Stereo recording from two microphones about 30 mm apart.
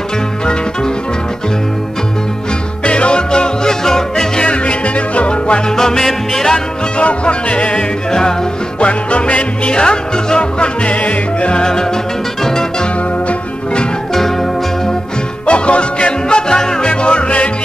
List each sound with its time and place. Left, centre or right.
2.8 s music: left; by 4.3 s centre
4.4 s music: left
5.8 s music: centre
6.5 s music: left
8.1 s music: left
8.7 s music: left
10.9 s music: left
15.4 s music: left